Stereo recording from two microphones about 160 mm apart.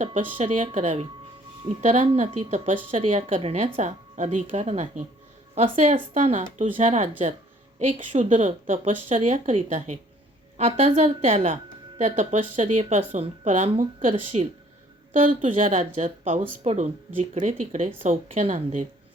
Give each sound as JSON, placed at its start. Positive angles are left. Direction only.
{"t": 0.0, "sound": "speech", "side_deg": -40}
{"t": 0.4, "sound": "speech", "side_deg": -55}
{"t": 10.7, "sound": "speech", "side_deg": -40}
{"t": 12.8, "sound": "speech", "side_deg": -35}
{"t": 13.1, "sound": "a woman's voice", "side_deg": -50}